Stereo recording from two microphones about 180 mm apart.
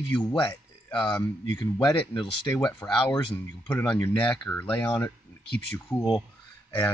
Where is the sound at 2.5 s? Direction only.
5° left (ahead or behind).